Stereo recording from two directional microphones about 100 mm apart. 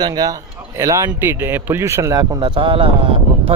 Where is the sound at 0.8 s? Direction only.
30° right (ahead or behind).